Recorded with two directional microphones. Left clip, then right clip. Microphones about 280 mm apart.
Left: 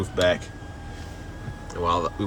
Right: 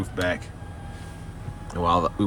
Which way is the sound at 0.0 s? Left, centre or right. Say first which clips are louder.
Left 5 dB; centre.